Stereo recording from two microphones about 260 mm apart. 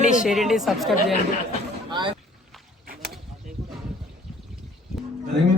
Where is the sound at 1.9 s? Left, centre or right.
Centre.